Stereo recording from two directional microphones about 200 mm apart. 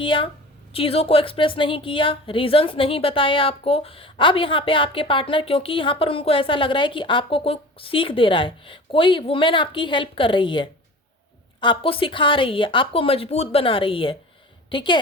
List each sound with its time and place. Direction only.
0.0 s a woman's voice: 25° left (ahead or behind)